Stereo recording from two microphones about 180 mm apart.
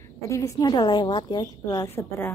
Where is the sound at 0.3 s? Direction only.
15° left (ahead or behind).